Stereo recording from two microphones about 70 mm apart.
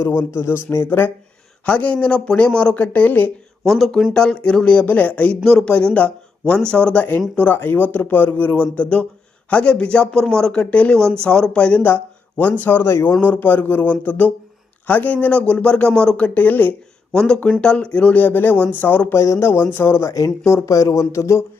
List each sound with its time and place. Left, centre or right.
0.0 s speech: left
1.6 s speech: left
3.7 s speech: centre
4.1 s speech: centre
5.4 s speech: centre
5.7 s speech: centre
17.2 s speech: centre
19.1 s speech: left
19.4 s speech: left
20.7 s speech: left